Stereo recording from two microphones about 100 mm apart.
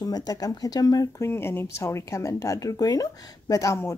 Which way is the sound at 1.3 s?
25° left (ahead or behind).